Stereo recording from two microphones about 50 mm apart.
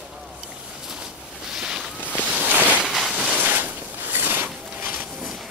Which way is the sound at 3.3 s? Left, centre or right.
Right.